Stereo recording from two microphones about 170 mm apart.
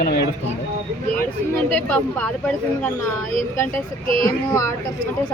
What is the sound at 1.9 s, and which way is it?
Speech, 5° left (ahead or behind).